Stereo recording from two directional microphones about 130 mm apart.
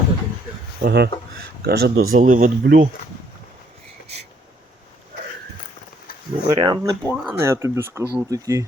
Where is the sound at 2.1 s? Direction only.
90° right.